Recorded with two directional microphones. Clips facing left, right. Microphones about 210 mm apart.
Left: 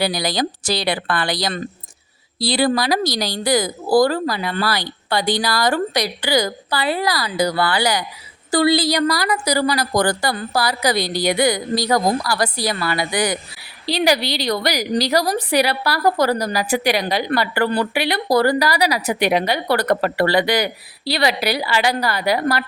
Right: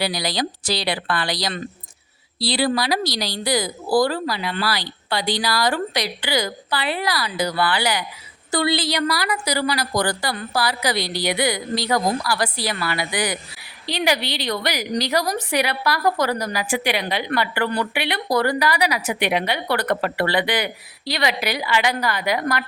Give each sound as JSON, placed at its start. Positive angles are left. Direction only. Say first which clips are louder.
{"t": 0.0, "sound": "a woman's voice", "louder": "left 3 dB", "side_deg": 50}